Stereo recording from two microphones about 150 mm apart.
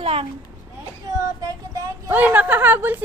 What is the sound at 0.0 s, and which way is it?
Speech, 40° right (ahead or behind).